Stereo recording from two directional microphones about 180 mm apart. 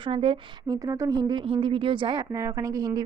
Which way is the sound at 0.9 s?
20° right (ahead or behind).